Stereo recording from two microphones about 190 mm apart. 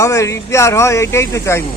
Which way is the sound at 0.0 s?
15° left (ahead or behind).